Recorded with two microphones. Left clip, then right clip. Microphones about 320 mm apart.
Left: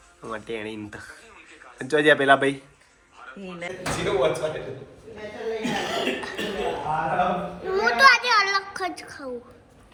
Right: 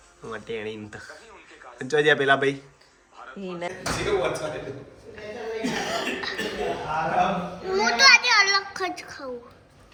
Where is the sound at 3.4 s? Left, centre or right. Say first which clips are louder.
Right 3 dB; right.